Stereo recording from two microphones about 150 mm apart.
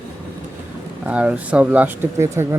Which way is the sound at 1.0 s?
10° right (ahead or behind).